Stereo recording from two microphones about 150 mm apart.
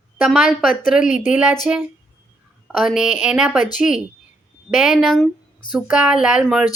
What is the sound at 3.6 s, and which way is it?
Speech, 60° left (ahead or behind).